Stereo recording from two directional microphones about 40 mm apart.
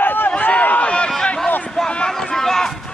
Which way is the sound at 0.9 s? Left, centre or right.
Left.